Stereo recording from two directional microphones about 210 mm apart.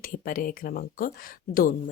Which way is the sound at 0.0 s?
45° left (ahead or behind).